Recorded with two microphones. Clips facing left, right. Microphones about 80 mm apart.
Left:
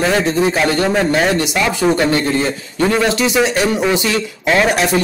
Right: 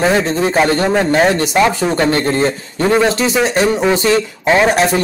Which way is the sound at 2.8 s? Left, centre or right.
Centre.